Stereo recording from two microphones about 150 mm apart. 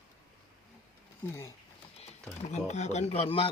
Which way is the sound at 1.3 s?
15° left (ahead or behind).